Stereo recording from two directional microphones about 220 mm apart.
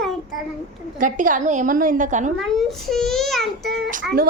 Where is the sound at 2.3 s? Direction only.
Centre (ahead or behind).